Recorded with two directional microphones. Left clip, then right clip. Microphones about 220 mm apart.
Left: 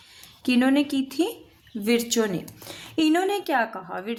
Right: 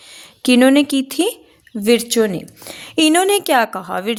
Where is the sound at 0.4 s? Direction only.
45° right (ahead or behind).